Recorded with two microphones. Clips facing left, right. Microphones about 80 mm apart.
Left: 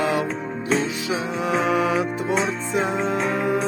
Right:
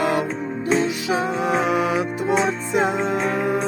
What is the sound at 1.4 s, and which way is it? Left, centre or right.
Music, centre.